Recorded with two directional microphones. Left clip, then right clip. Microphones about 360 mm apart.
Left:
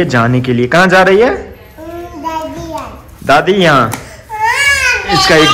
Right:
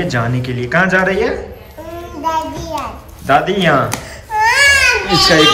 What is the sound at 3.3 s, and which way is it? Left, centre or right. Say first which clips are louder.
Speech: left 4 dB; centre.